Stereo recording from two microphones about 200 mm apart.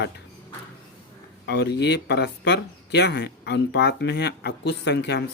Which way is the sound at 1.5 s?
55° left (ahead or behind).